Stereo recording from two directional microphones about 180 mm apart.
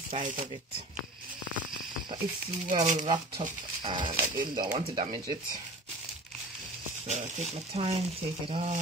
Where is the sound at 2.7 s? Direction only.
40° right (ahead or behind).